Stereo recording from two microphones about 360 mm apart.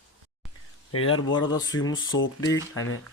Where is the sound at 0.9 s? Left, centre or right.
Left.